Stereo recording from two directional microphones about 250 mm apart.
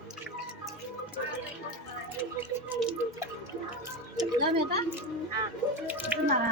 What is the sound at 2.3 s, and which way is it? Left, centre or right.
Music, centre.